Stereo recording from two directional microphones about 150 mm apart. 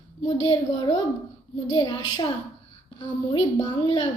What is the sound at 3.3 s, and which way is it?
Child singing, 30° left (ahead or behind).